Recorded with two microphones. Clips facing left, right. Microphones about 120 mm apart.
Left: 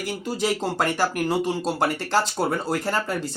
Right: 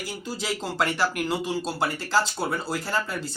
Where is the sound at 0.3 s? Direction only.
45° left (ahead or behind).